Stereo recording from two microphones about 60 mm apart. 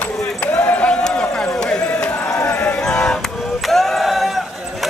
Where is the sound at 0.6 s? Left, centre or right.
Left.